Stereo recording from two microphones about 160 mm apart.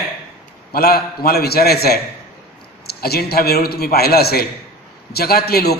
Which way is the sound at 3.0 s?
75° left (ahead or behind).